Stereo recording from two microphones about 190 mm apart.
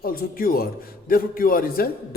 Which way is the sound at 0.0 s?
50° left (ahead or behind).